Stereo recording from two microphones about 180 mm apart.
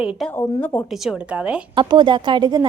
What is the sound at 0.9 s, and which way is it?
Speech, 5° right (ahead or behind).